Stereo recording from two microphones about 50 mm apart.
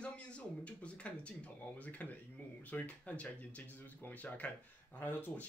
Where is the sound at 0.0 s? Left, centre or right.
Left.